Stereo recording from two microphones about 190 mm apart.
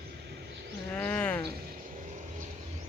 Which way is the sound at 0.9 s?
10° left (ahead or behind).